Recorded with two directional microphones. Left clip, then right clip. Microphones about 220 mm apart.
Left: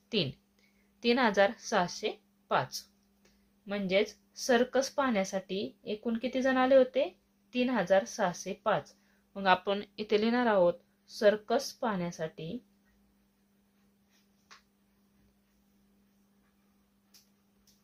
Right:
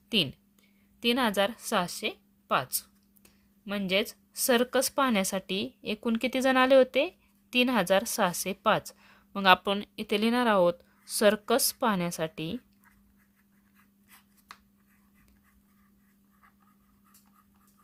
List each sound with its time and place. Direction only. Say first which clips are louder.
0.9 s speech: even; 40° right (ahead or behind)